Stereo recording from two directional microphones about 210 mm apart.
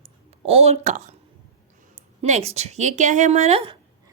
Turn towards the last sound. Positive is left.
turn(degrees=-30)  # may be behind; listen again after turning